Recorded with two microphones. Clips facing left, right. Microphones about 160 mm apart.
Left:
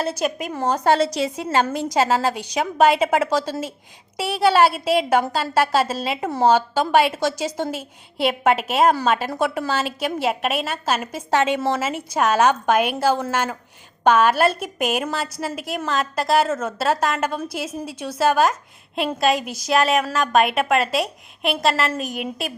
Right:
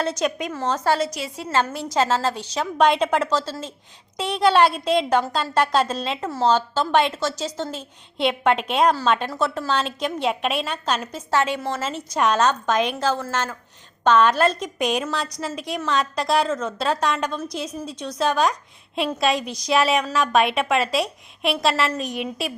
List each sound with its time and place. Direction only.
0.0 s a woman's voice: 5° left (ahead or behind)
0.9 s a woman's voice: 30° left (ahead or behind); by 11.2 s 5° left (ahead or behind)
11.3 s a woman's voice: 20° left (ahead or behind)
11.8 s a woman's voice: 10° left (ahead or behind)